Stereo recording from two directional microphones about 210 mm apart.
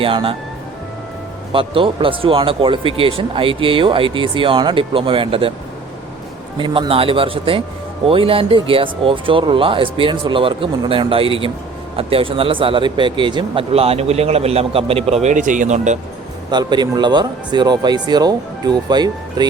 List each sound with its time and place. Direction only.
0.0 s speech: 25° right (ahead or behind)
1.5 s speech: 25° right (ahead or behind)
6.6 s speech: 25° right (ahead or behind)
16.5 s speech: 20° right (ahead or behind)